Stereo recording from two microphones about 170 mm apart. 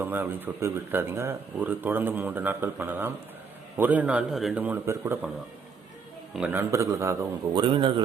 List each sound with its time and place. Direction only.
0.0 s speech: 10° right (ahead or behind)
6.3 s speech: 10° right (ahead or behind)
7.6 s a man's voice: 30° right (ahead or behind)